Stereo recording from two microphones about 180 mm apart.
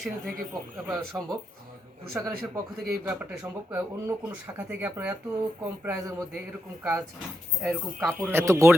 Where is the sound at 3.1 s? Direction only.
10° right (ahead or behind).